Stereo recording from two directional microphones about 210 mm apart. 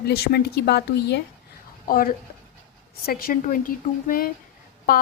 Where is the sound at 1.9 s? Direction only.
40° left (ahead or behind).